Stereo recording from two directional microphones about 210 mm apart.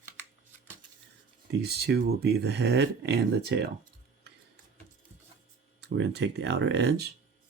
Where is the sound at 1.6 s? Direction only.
50° right (ahead or behind).